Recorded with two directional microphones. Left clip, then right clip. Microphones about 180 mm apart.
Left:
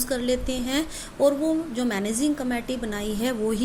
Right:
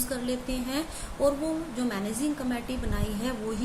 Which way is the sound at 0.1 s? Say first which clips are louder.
Left 8 dB; 45° left (ahead or behind).